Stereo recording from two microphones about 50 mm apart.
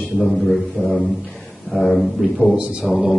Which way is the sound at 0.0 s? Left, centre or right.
Centre.